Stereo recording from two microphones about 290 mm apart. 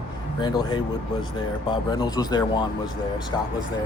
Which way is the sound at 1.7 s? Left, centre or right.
Centre.